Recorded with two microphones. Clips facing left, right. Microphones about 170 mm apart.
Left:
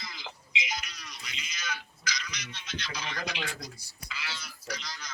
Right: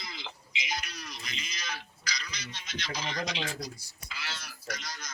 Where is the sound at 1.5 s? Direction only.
35° right (ahead or behind).